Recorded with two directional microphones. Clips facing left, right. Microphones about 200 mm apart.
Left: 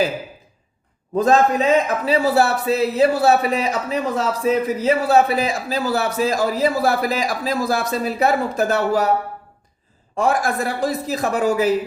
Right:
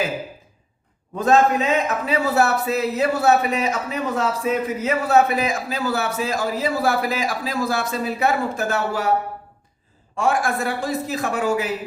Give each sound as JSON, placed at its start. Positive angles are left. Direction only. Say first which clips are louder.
{"t": 1.1, "sound": "a man's voice", "louder": "left 1 dB", "side_deg": 35}
{"t": 10.2, "sound": "a man's voice", "louder": "left 2 dB", "side_deg": 40}